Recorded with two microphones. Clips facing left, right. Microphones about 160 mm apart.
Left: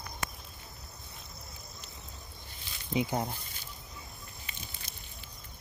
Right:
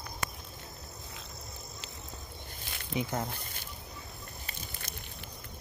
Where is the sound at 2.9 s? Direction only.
20° left (ahead or behind).